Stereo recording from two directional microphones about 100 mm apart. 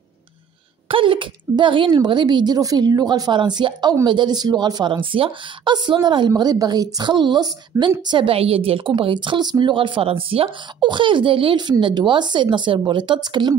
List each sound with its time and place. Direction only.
0.8 s a woman's voice: 60° right (ahead or behind)
7.7 s a woman's voice: 30° right (ahead or behind)
8.1 s a woman's voice: 65° right (ahead or behind); by 13.6 s 45° right (ahead or behind)